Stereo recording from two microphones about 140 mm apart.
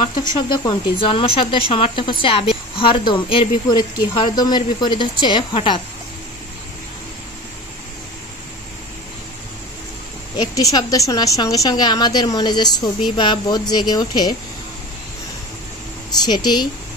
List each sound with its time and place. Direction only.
0.7 s speech: 35° left (ahead or behind)
10.3 s a woman's voice: 30° left (ahead or behind)
16.3 s speech: 30° left (ahead or behind)